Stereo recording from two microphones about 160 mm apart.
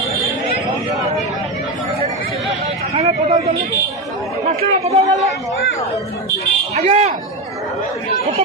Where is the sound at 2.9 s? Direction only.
40° right (ahead or behind).